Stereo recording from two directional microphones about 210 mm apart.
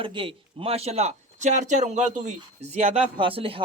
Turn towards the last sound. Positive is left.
turn(degrees=-25)  # may be behind; listen again after turning